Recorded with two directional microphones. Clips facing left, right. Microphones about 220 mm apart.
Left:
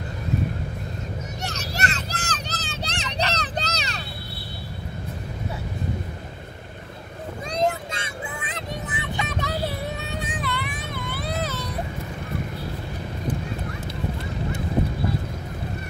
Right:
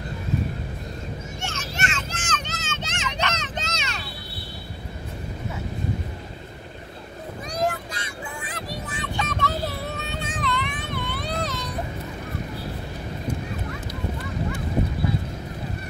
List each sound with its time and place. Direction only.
1.4 s vehicle: 35° left (ahead or behind)
7.5 s vehicle: 25° left (ahead or behind)
10.3 s a sound: 10° left (ahead or behind)